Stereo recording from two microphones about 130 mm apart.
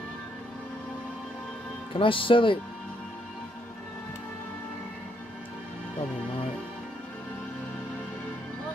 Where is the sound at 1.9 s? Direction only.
40° left (ahead or behind).